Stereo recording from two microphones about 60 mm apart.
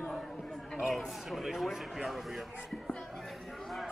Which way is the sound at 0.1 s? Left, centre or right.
Centre.